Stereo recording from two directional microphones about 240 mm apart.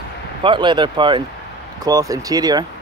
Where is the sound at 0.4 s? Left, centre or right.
Centre.